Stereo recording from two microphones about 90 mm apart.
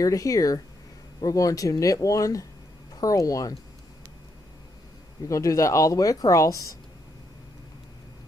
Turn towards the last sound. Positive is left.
turn(degrees=35)  # may be behind; listen again after turning